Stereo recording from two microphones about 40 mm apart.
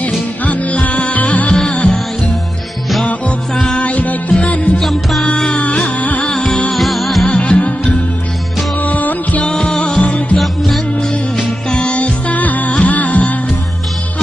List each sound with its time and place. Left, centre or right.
0.5 s music: left
1.7 s music: left
3.8 s music: left
4.7 s music: centre
5.5 s music: left
5.9 s music: left
6.2 s music: centre
6.7 s music: centre
7.2 s music: left
9.4 s music: centre
11.7 s music: left